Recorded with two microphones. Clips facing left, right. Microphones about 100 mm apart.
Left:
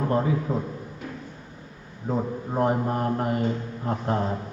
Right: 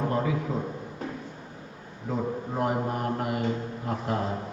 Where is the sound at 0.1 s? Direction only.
35° left (ahead or behind).